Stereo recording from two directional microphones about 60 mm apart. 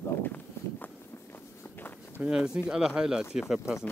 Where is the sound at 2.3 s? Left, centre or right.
Centre.